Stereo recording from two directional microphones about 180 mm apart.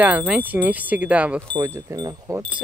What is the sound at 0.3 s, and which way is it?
Speech, 10° right (ahead or behind).